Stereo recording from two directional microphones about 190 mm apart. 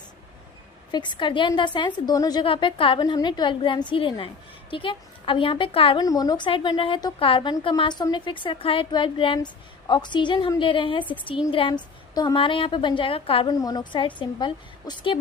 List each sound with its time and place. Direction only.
0.9 s a woman's voice: 25° left (ahead or behind)